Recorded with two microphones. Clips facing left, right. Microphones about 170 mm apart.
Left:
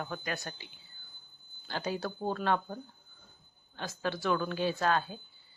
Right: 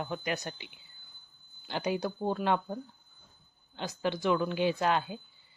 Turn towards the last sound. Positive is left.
turn(degrees=-15)  # may be behind; listen again after turning